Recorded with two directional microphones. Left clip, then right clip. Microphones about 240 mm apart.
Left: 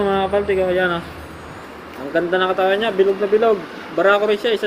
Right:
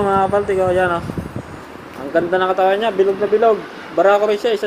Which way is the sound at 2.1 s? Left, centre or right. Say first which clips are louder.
Right 2 dB; centre.